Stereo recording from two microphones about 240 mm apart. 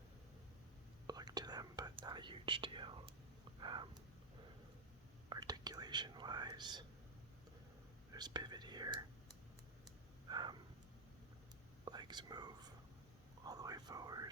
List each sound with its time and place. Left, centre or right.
1.0 s whispering: centre
3.6 s a sound: centre
5.3 s whispering: centre
8.1 s whispering: centre
10.2 s a sound: centre
11.9 s whispering: centre